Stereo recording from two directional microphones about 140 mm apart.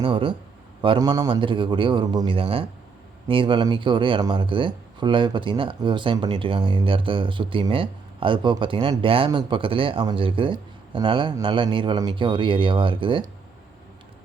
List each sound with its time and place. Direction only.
0.0 s speech: 40° right (ahead or behind)